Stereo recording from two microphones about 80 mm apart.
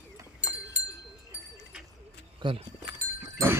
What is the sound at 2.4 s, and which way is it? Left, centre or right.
Speech, right.